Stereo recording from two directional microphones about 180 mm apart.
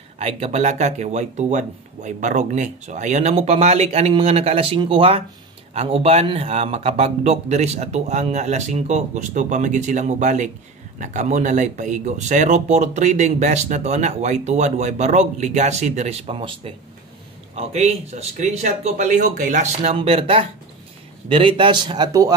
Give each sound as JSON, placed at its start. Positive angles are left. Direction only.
{"t": 0.2, "sound": "speech", "side_deg": -35}